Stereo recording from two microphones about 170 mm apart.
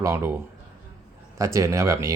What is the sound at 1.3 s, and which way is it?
Speech, 20° right (ahead or behind).